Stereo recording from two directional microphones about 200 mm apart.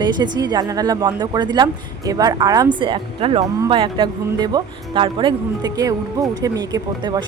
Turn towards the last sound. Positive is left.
turn(degrees=-20)  # may be behind; listen again after turning